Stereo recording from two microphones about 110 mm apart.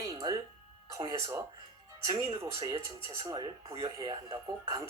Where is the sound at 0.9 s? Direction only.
30° right (ahead or behind).